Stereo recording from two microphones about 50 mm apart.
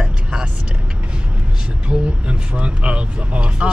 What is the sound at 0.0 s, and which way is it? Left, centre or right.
Vehicle, centre.